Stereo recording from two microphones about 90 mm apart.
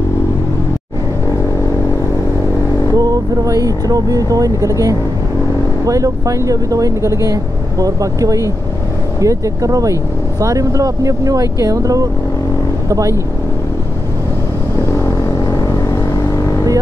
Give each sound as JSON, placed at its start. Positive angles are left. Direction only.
{"t": 2.9, "sound": "speech", "side_deg": -40}
{"t": 14.9, "sound": "vehicle", "side_deg": 35}